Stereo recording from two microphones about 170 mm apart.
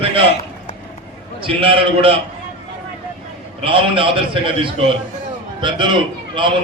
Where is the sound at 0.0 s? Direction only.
35° right (ahead or behind).